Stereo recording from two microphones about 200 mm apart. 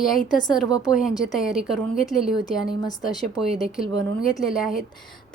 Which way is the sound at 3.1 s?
Centre (ahead or behind).